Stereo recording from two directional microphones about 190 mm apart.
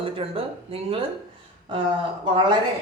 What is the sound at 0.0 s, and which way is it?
Speech, 30° right (ahead or behind).